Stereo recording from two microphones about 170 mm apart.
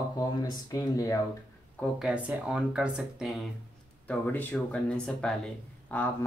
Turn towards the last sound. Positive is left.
turn(degrees=10)  # may be behind; listen again after turning